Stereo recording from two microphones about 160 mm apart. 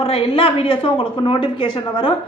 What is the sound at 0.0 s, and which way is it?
A woman's voice, 35° left (ahead or behind).